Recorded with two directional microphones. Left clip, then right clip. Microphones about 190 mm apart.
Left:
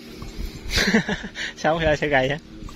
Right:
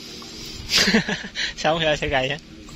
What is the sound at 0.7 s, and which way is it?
Speech, 20° left (ahead or behind).